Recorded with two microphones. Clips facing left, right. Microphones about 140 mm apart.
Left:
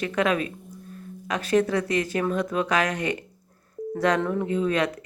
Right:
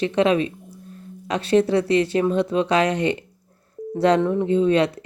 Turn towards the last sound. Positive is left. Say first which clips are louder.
# right 6 dB
turn(degrees=-30)  # may be behind; listen again after turning